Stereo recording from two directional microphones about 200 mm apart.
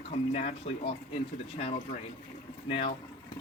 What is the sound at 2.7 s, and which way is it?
Speech, 25° left (ahead or behind).